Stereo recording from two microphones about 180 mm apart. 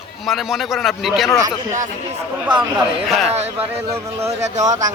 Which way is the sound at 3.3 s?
35° right (ahead or behind).